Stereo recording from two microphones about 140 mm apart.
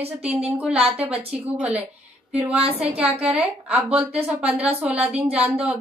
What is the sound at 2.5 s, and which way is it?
Speech, 45° right (ahead or behind).